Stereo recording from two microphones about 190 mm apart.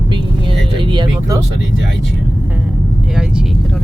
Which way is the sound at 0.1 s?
25° right (ahead or behind).